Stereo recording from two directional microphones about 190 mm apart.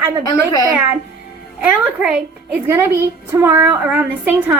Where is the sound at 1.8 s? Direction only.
5° right (ahead or behind).